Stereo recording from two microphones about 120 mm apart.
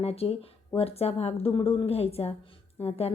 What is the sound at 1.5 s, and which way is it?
Speech, 45° left (ahead or behind).